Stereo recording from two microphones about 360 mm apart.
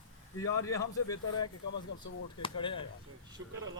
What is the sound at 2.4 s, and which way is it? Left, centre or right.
Speech, centre.